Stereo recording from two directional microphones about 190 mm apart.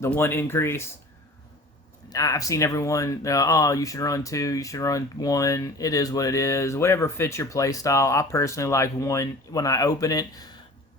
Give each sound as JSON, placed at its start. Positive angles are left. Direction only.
{"t": 0.0, "sound": "speech", "side_deg": 10}
{"t": 2.0, "sound": "speech", "side_deg": 20}